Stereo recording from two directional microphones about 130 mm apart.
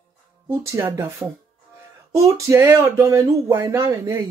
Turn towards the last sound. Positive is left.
turn(degrees=-20)  # may be behind; listen again after turning